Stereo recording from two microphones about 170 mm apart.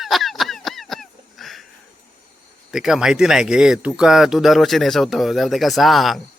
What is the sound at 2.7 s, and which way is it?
Speech, centre (ahead or behind).